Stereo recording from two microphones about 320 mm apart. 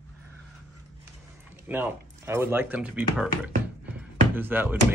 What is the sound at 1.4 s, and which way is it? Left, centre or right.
Speech, centre.